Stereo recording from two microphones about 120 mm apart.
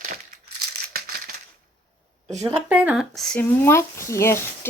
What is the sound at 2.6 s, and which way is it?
Speech, 10° right (ahead or behind).